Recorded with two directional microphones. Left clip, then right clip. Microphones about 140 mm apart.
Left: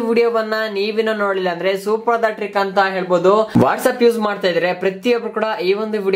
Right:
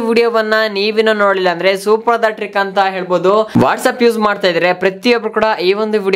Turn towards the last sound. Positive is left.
turn(degrees=-35)  # may be behind; listen again after turning